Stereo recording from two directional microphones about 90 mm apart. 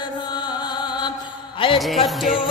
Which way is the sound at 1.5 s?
75° left (ahead or behind).